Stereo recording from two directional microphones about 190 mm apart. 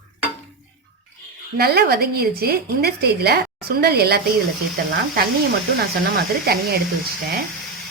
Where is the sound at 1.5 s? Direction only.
55° right (ahead or behind).